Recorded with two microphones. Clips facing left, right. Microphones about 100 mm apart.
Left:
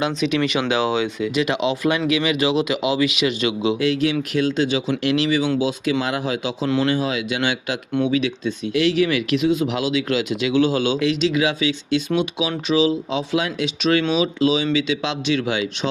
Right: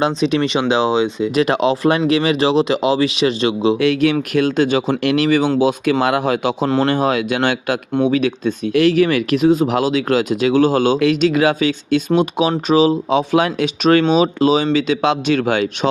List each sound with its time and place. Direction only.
0.0 s speech: 35° right (ahead or behind)
1.4 s speech: 40° right (ahead or behind)
3.8 s speech: 60° right (ahead or behind)
6.7 s speech: 40° right (ahead or behind)
6.9 s speech: 55° right (ahead or behind)